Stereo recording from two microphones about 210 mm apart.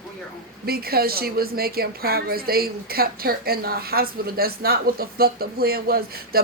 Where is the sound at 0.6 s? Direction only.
45° right (ahead or behind).